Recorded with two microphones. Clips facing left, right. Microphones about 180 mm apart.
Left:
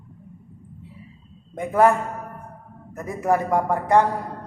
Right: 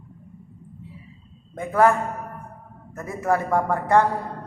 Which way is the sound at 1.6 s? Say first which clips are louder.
Left 1 dB; 20° left (ahead or behind).